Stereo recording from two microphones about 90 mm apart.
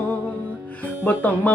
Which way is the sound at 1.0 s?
20° left (ahead or behind).